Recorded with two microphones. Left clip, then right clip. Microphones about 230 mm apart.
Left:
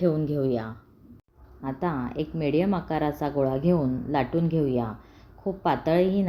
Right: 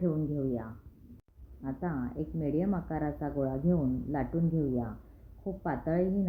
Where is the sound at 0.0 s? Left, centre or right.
Left.